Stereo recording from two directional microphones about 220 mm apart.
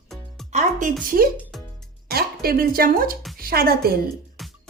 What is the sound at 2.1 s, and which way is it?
A woman's voice, 45° right (ahead or behind).